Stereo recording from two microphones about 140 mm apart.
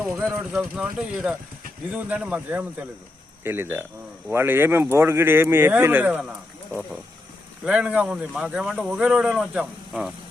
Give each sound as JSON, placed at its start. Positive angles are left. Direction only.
{"t": 0.0, "sound": "speech", "side_deg": -5}
{"t": 7.6, "sound": "speech", "side_deg": -5}